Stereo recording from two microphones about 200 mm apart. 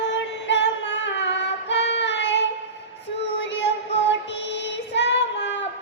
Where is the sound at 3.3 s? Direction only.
65° left (ahead or behind).